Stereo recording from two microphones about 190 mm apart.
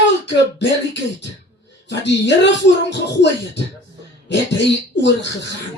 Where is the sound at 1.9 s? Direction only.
65° left (ahead or behind).